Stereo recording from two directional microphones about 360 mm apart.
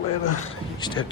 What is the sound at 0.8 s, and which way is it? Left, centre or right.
Speech, centre.